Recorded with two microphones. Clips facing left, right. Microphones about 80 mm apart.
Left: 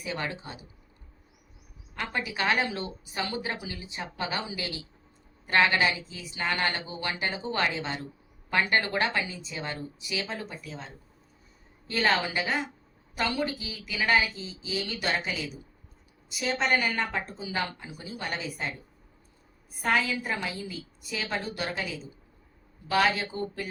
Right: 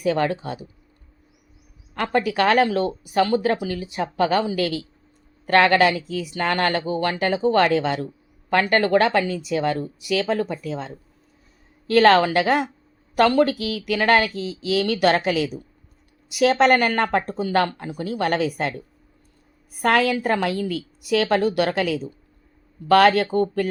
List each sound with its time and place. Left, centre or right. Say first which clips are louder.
0.0 s speech: right 13 dB; right
2.0 s speech: right 11 dB; right
11.9 s speech: right 12 dB; right
19.8 s speech: right 8 dB; right